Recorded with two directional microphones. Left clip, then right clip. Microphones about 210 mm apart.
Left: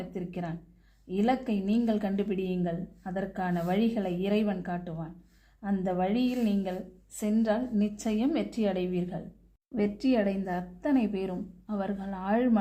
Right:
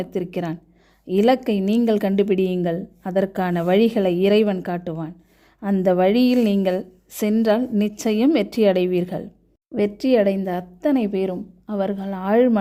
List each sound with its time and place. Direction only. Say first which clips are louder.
0.1 s a woman's voice: right 12 dB; 45° right (ahead or behind)